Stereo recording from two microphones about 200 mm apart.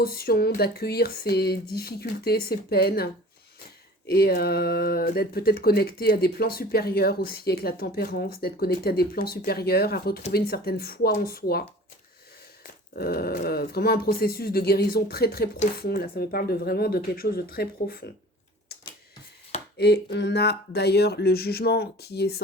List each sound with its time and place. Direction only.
0.0 s speech: 50° left (ahead or behind)
13.0 s speech: 50° left (ahead or behind)
19.7 s speech: 55° left (ahead or behind)